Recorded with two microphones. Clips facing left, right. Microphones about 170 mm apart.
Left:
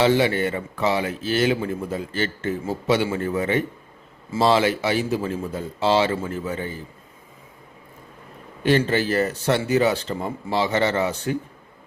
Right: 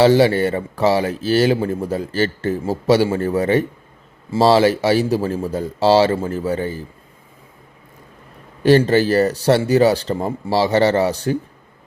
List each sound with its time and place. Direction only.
0.0 s speech: 35° right (ahead or behind)
8.6 s speech: 35° right (ahead or behind)